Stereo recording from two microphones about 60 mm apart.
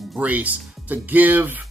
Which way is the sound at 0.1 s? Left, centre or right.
Right.